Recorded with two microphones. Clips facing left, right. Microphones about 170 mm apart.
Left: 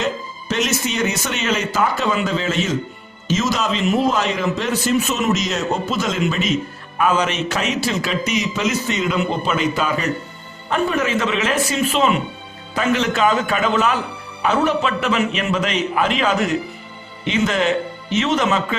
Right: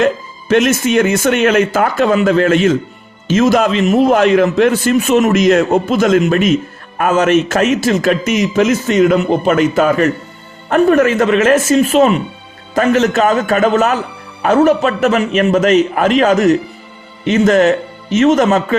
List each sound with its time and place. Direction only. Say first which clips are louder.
0.0 s a man's voice: right 9 dB; 55° right (ahead or behind)